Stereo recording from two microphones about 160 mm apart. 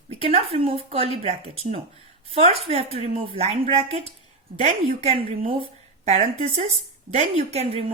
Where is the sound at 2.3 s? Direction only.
40° right (ahead or behind).